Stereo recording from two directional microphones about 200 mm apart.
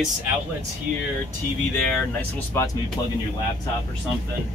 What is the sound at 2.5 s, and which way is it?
Speech, 15° left (ahead or behind).